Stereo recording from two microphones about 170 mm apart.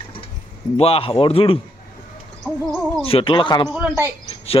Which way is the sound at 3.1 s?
30° left (ahead or behind).